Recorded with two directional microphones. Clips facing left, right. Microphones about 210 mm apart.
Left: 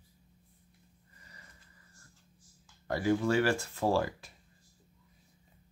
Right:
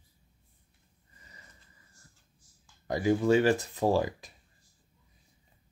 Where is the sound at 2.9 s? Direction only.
15° right (ahead or behind).